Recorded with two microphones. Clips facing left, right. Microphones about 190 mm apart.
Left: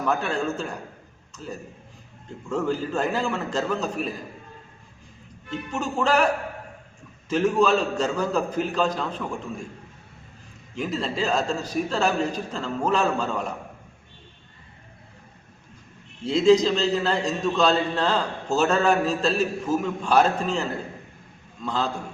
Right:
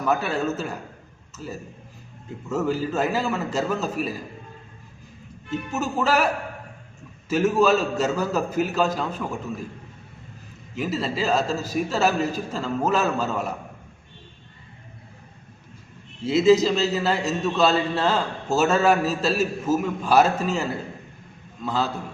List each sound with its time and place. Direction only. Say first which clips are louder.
0.0 s a man's voice: right 1 dB; 5° right (ahead or behind)
5.5 s a man's voice: right 2 dB; 5° right (ahead or behind)
7.3 s a man's voice: right 1 dB; 5° right (ahead or behind)
10.8 s a man's voice: right 1 dB; 5° right (ahead or behind)
16.2 s a man's voice: right 1 dB; 5° right (ahead or behind)